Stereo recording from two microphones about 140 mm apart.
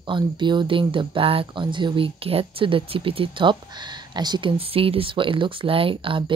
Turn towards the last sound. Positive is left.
turn(degrees=-40)  # may be behind; listen again after turning